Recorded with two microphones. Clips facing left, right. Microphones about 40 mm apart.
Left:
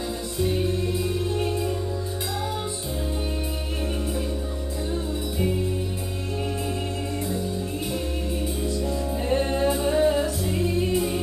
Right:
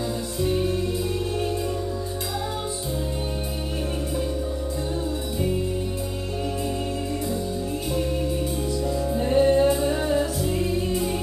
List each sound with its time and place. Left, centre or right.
0.4 s music: centre
8.9 s music: centre
9.4 s music: centre